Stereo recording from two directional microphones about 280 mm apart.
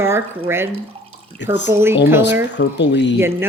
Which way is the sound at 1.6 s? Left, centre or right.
Centre.